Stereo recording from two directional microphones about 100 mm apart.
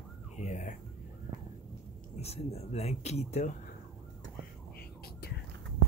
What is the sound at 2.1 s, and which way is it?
Speech, 90° left.